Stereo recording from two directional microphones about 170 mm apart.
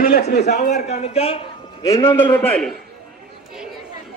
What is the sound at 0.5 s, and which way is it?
Speech, 45° left (ahead or behind).